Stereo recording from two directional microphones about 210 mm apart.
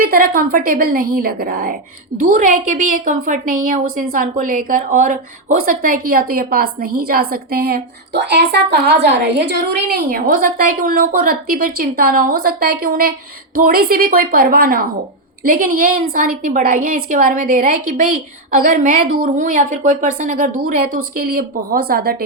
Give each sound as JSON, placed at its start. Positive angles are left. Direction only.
{"t": 0.0, "sound": "a woman's voice", "side_deg": -45}